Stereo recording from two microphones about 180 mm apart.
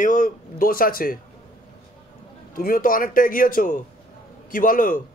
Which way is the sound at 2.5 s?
55° left (ahead or behind).